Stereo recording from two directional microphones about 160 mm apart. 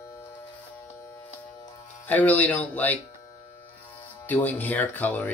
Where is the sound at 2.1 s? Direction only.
10° left (ahead or behind).